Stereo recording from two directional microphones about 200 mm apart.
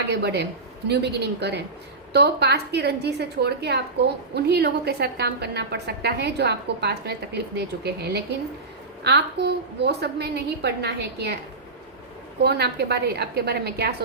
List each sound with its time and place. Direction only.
0.1 s a woman's voice: 55° right (ahead or behind)
12.4 s a woman's voice: 55° right (ahead or behind)